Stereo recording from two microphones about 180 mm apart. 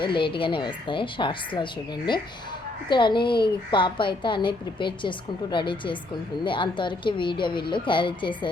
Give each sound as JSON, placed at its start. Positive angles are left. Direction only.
{"t": 0.0, "sound": "a woman's voice", "side_deg": 25}
{"t": 2.9, "sound": "a woman's voice", "side_deg": 25}